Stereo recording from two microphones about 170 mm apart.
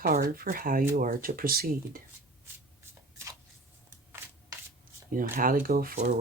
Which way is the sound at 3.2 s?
15° right (ahead or behind).